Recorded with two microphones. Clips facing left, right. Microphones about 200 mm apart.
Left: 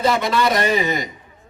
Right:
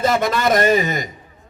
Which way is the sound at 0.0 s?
45° right (ahead or behind).